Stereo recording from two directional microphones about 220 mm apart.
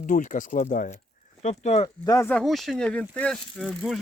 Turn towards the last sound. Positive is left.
turn(degrees=0)  # may be behind; listen again after turning